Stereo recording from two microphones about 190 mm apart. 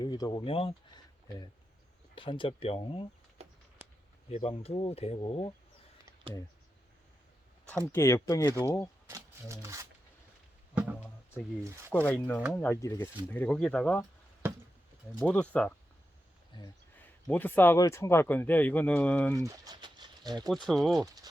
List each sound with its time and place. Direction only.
0.0 s speech: 20° left (ahead or behind)
2.1 s speech: 25° left (ahead or behind)
4.3 s speech: 30° left (ahead or behind)
7.9 s speech: 15° left (ahead or behind)
9.0 s speech: 15° right (ahead or behind)
11.9 s speech: 10° left (ahead or behind)
15.2 s speech: 5° left (ahead or behind)
17.2 s speech: 10° left (ahead or behind)
19.4 s bird: 20° right (ahead or behind)
20.5 s speech: centre (ahead or behind)